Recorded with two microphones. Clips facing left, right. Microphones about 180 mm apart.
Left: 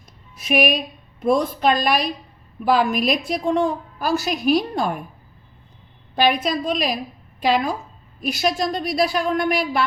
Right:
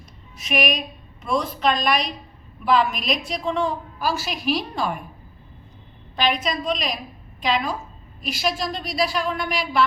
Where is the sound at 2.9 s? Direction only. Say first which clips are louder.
Left 5 dB; 55° left (ahead or behind).